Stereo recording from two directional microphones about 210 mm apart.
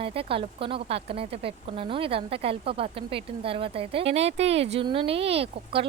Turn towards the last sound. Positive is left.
turn(degrees=-25)  # may be behind; listen again after turning